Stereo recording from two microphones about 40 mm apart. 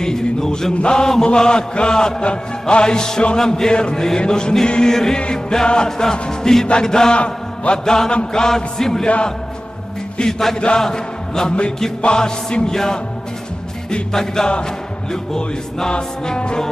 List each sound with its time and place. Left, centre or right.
0.0 s a sound: centre
0.7 s music: left
3.3 s chant: centre
4.2 s music: centre
4.9 s chant: centre
7.2 s a man's voice: left
8.3 s chant: centre
9.0 s music: left
10.8 s music: centre
12.7 s chant: centre
14.1 s chant: centre
15.3 s music: centre